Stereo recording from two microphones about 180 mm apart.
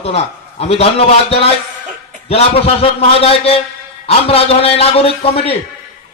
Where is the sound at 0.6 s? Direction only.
35° left (ahead or behind).